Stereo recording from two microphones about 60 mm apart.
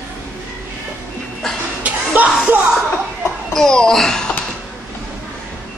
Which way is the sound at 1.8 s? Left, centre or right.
Right.